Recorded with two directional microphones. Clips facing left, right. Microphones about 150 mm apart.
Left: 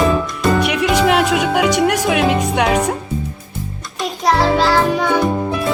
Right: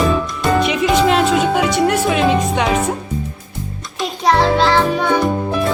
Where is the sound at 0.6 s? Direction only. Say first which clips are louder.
Right 1 dB; 65° left (ahead or behind).